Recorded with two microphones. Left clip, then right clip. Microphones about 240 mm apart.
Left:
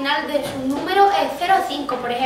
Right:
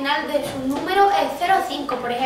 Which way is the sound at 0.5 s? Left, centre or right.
Left.